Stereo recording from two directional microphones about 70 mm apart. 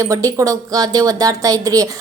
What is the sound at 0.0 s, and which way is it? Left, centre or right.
A woman's voice, right.